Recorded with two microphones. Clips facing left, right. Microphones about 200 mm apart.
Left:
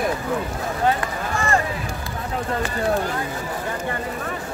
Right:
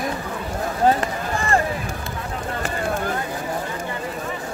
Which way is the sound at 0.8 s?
30° right (ahead or behind).